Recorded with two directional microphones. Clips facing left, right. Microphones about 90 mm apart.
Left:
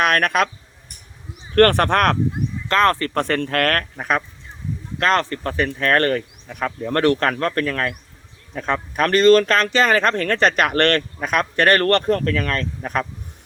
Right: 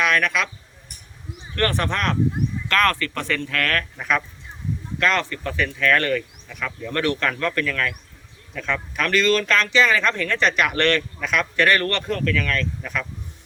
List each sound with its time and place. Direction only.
0.0 s speech: 50° left (ahead or behind)
1.5 s speech: 55° left (ahead or behind)
2.6 s speech: 30° left (ahead or behind)
3.2 s speech: 45° left (ahead or behind)